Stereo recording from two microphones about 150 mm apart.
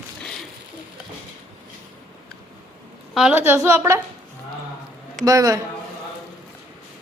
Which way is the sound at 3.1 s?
10° right (ahead or behind).